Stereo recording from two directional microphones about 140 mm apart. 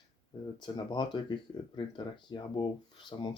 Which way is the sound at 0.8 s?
30° left (ahead or behind).